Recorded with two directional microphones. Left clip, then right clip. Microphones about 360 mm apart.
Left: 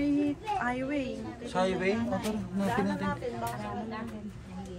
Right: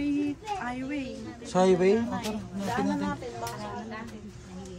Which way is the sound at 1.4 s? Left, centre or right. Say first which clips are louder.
Right 7 dB; centre.